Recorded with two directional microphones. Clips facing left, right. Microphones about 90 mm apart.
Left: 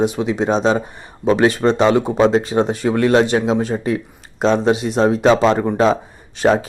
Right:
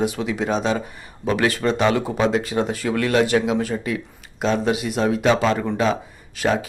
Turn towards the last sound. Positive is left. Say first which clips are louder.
# left 6 dB
turn(degrees=35)  # may be behind; listen again after turning